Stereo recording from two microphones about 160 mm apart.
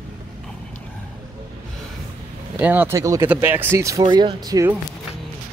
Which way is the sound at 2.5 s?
10° right (ahead or behind).